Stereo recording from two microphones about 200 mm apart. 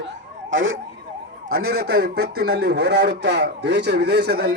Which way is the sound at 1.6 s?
50° right (ahead or behind).